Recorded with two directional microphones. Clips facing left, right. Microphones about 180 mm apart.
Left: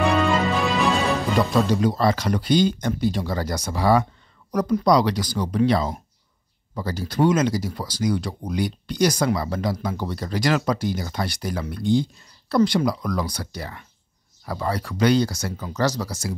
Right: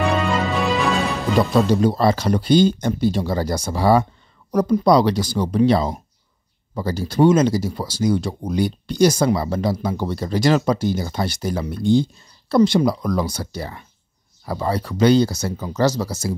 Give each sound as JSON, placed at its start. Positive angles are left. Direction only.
{"t": 0.0, "sound": "music", "side_deg": 0}
{"t": 1.7, "sound": "speech", "side_deg": -30}